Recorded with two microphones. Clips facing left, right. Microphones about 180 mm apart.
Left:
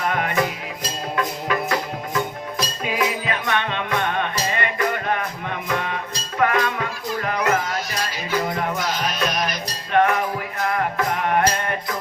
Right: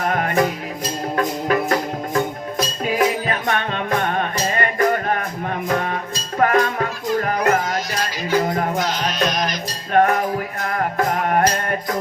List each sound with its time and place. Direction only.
0.0 s music: 45° right (ahead or behind)